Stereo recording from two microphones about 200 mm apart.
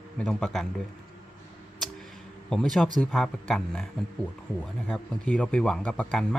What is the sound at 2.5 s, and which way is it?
Speech, centre (ahead or behind).